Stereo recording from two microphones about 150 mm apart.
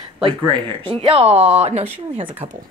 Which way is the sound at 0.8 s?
40° right (ahead or behind).